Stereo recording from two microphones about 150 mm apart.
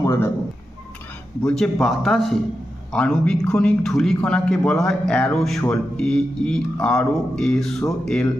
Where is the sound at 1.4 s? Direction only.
5° left (ahead or behind).